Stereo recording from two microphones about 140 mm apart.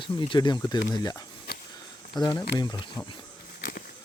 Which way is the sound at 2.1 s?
30° left (ahead or behind).